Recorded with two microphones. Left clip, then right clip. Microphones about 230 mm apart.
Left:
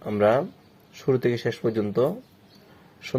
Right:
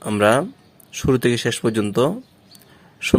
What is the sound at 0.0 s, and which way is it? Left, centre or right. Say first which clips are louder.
Speech: right 4 dB; right.